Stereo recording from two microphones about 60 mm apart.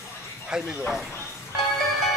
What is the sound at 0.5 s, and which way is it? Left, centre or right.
Speech, centre.